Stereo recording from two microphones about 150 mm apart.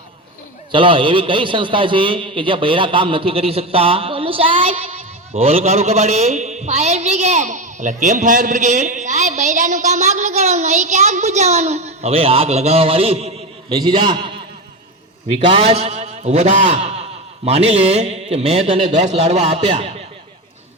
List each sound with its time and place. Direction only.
0.7 s a man's voice: 35° right (ahead or behind)
13.7 s a man's voice: 30° right (ahead or behind)
15.4 s a man's voice: 40° right (ahead or behind)